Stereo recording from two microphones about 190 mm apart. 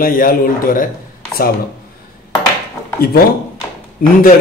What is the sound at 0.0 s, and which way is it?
Speech, 50° left (ahead or behind).